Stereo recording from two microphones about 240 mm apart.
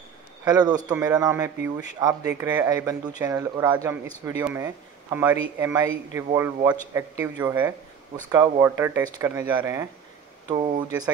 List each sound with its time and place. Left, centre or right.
0.5 s speech: centre